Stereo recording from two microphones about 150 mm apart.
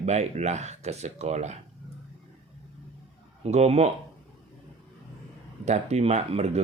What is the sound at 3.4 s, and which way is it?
Speech, 45° right (ahead or behind).